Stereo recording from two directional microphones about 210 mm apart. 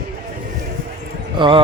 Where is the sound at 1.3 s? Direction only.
25° right (ahead or behind).